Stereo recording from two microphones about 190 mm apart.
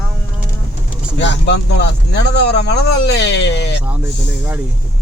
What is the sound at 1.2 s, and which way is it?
Speech, 65° left (ahead or behind).